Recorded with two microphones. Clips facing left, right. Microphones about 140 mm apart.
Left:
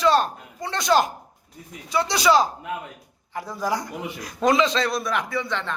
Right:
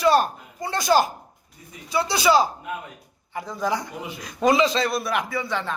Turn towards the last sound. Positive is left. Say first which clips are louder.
# even
turn(degrees=-5)  # may be behind; listen again after turning